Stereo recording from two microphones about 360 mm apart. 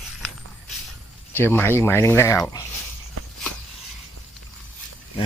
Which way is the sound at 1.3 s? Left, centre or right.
Centre.